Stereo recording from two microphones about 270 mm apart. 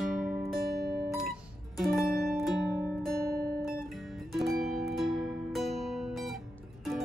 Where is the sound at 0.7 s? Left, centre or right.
Right.